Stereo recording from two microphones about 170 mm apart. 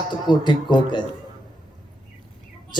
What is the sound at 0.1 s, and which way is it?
Speech, 25° left (ahead or behind).